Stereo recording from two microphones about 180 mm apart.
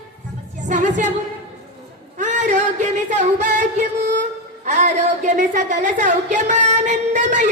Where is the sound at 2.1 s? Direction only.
40° right (ahead or behind).